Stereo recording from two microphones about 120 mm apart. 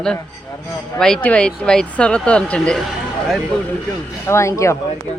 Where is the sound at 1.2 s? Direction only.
10° left (ahead or behind).